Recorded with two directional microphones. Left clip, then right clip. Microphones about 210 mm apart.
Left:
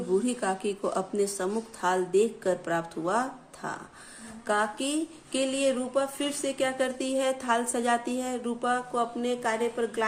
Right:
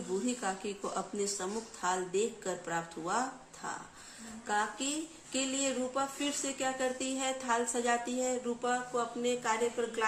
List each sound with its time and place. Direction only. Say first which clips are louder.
0.3 s speech: left 7 dB; 45° left (ahead or behind)